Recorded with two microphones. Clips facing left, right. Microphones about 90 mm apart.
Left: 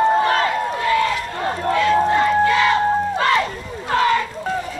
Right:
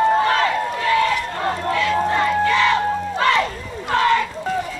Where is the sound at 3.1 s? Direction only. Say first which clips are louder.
Even; 30° left (ahead or behind).